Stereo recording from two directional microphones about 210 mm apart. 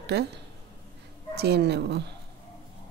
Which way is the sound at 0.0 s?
50° right (ahead or behind).